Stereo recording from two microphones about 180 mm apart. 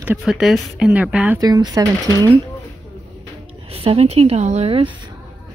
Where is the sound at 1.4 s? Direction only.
20° right (ahead or behind).